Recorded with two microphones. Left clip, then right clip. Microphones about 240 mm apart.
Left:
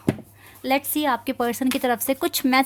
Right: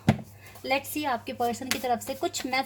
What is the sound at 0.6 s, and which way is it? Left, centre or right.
A woman's voice, left.